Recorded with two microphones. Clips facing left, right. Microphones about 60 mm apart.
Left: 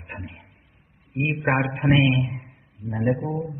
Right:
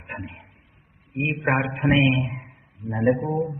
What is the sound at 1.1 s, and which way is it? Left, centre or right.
A man's voice, centre.